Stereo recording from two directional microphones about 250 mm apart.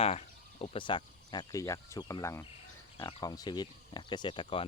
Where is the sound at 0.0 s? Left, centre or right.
Left.